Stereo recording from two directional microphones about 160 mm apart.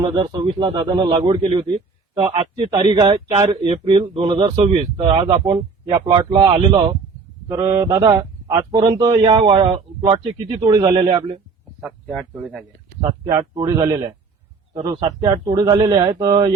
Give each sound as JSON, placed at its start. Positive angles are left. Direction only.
{"t": 0.0, "sound": "a man's voice", "side_deg": -30}
{"t": 11.8, "sound": "speech", "side_deg": -5}
{"t": 13.3, "sound": "a man's voice", "side_deg": -30}